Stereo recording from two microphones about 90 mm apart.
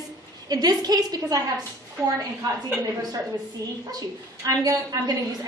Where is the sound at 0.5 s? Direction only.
45° right (ahead or behind).